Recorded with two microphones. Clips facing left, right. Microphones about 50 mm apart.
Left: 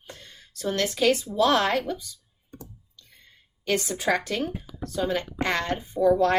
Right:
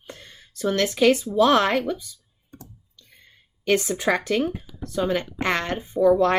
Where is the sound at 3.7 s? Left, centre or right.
Right.